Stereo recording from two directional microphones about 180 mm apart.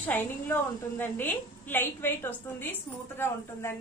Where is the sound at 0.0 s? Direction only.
10° left (ahead or behind).